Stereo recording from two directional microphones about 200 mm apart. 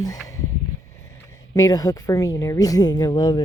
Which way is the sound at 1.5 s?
20° left (ahead or behind).